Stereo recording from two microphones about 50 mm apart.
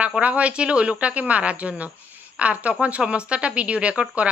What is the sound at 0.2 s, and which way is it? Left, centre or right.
Speech, right.